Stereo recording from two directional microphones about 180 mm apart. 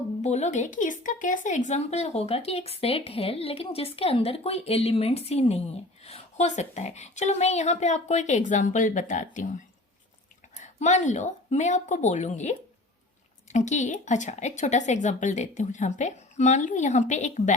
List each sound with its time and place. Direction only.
0.2 s speech: 40° left (ahead or behind)
10.6 s speech: 40° left (ahead or behind)